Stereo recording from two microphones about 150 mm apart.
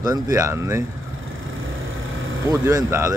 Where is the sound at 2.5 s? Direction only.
20° right (ahead or behind).